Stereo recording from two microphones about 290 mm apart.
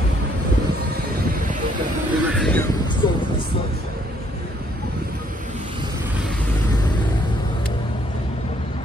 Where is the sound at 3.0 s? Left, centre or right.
Centre.